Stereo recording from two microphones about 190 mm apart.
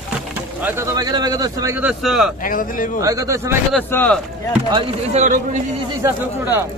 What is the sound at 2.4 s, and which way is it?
Speech, 45° left (ahead or behind).